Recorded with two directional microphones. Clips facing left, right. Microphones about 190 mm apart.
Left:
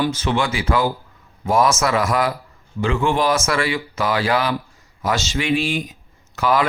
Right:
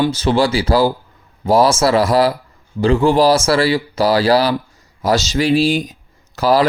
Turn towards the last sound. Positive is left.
turn(degrees=-35)  # may be behind; listen again after turning